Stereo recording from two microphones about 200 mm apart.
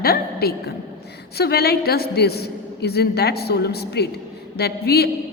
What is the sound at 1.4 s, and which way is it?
A woman's voice, 55° left (ahead or behind).